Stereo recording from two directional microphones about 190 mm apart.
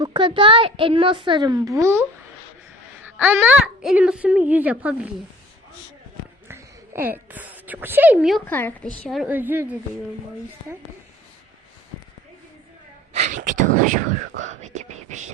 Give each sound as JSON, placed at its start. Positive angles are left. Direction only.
{"t": 0.0, "sound": "a woman's voice", "side_deg": -25}
{"t": 6.5, "sound": "a sound", "side_deg": -10}
{"t": 8.4, "sound": "a woman's voice", "side_deg": 10}
{"t": 9.0, "sound": "a child's voice", "side_deg": 0}
{"t": 13.1, "sound": "speech", "side_deg": -40}